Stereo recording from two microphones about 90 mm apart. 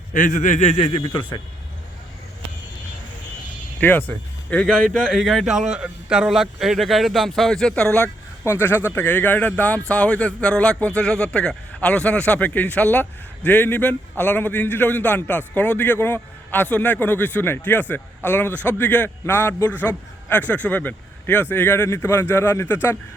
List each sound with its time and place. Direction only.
0.9 s speech: 65° left (ahead or behind)
3.8 s a man's voice: 20° left (ahead or behind)
8.4 s speech: 25° left (ahead or behind)